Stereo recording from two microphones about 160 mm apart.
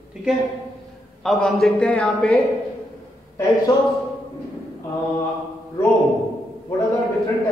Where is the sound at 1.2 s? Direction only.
Centre (ahead or behind).